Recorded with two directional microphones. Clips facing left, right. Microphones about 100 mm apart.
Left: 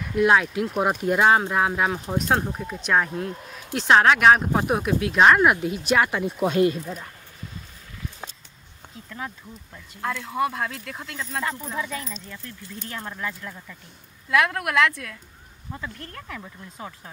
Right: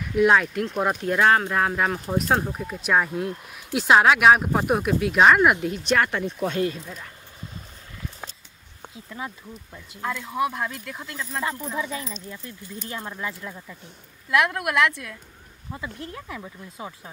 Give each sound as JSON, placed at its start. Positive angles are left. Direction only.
{"t": 0.1, "sound": "speech", "side_deg": 0}
{"t": 10.0, "sound": "speech", "side_deg": 0}
{"t": 12.1, "sound": "speech", "side_deg": -15}
{"t": 14.3, "sound": "speech", "side_deg": -5}